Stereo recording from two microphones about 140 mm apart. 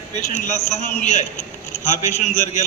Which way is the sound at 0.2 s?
55° left (ahead or behind).